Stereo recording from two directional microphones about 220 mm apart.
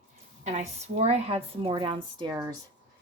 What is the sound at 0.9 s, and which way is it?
Speech, 30° right (ahead or behind).